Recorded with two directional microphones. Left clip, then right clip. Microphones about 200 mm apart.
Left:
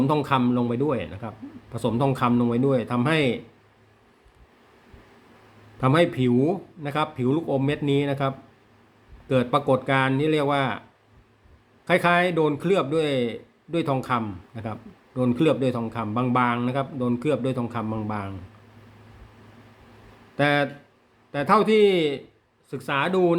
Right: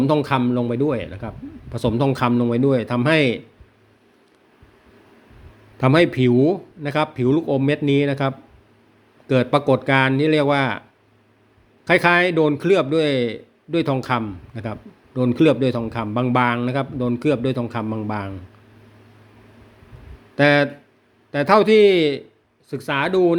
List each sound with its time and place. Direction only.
0.0 s a man's voice: 20° right (ahead or behind)
5.8 s a man's voice: 30° right (ahead or behind)
11.9 s a man's voice: 30° right (ahead or behind)
20.3 s a man's voice: 30° right (ahead or behind)